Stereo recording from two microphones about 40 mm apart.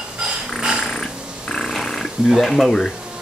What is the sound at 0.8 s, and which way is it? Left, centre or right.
Music, centre.